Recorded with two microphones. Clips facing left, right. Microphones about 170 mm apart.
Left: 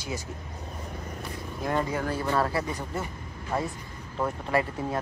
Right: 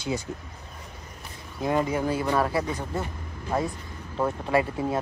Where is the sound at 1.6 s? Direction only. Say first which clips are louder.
Right 4 dB; 15° right (ahead or behind).